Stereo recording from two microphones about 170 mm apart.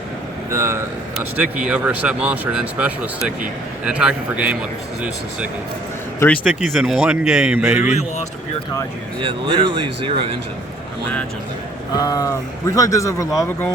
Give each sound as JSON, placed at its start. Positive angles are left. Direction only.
{"t": 0.5, "sound": "speech", "side_deg": -15}
{"t": 6.1, "sound": "speech", "side_deg": 10}
{"t": 6.5, "sound": "speech", "side_deg": -5}
{"t": 7.7, "sound": "a man's voice", "side_deg": 40}
{"t": 9.2, "sound": "speech", "side_deg": -30}
{"t": 11.9, "sound": "speech", "side_deg": 20}